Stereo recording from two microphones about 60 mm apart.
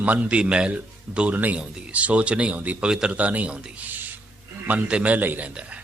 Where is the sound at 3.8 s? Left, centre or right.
Right.